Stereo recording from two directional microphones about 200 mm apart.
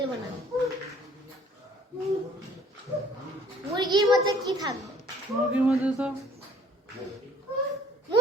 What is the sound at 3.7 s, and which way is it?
Speech, 20° right (ahead or behind).